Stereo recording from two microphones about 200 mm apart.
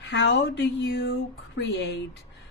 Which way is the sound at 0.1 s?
60° left (ahead or behind).